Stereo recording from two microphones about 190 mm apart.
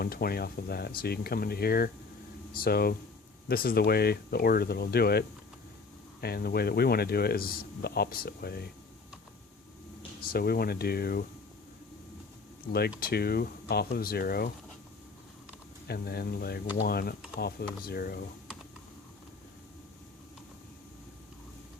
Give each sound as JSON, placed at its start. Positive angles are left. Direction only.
{"t": 0.0, "sound": "speech", "side_deg": 55}
{"t": 6.2, "sound": "speech", "side_deg": 55}
{"t": 10.2, "sound": "speech", "side_deg": 55}
{"t": 12.6, "sound": "speech", "side_deg": 55}
{"t": 15.9, "sound": "speech", "side_deg": 55}